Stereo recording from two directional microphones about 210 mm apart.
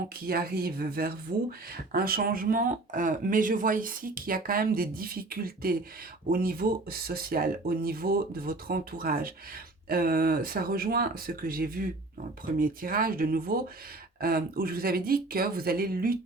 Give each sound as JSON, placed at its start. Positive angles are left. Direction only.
{"t": 0.3, "sound": "speech", "side_deg": -45}